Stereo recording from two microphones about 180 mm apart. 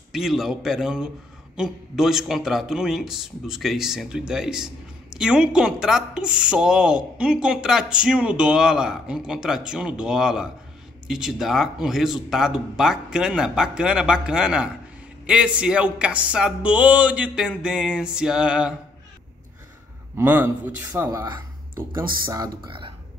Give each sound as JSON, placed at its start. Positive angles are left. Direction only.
{"t": 0.1, "sound": "speech", "side_deg": 0}
{"t": 20.2, "sound": "a man's voice", "side_deg": -10}
{"t": 22.3, "sound": "speech", "side_deg": -25}